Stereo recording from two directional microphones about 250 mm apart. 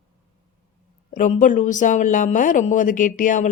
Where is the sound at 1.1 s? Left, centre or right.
Left.